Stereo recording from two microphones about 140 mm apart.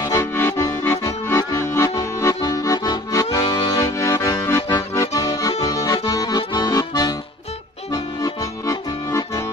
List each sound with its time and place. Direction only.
0.0 s accordion: 20° left (ahead or behind)